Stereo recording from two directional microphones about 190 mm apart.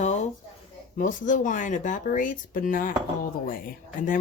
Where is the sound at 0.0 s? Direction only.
35° left (ahead or behind).